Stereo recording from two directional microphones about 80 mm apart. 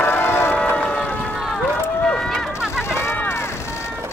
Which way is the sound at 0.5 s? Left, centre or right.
Centre.